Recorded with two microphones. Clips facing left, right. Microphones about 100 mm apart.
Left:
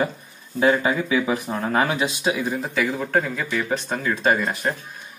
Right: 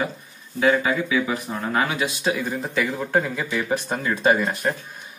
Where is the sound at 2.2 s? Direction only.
10° left (ahead or behind).